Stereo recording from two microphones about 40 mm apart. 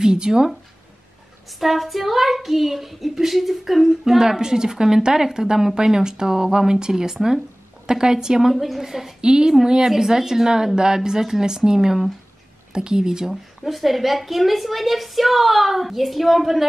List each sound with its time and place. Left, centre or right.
0.0 s speech: centre
1.6 s a woman's voice: centre
4.2 s speech: centre
9.2 s a woman's voice: right
13.3 s a woman's voice: centre